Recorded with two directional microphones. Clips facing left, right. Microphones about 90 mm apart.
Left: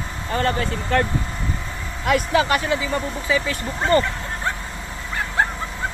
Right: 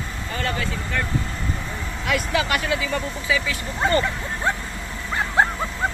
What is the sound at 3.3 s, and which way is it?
Speech, 40° left (ahead or behind).